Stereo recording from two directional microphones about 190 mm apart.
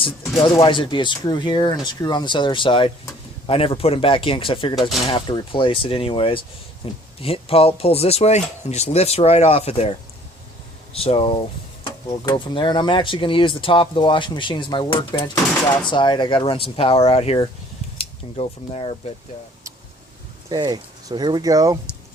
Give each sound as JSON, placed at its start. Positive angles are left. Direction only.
{"t": 0.0, "sound": "speech", "side_deg": 25}
{"t": 10.9, "sound": "speech", "side_deg": 30}
{"t": 20.5, "sound": "speech", "side_deg": -20}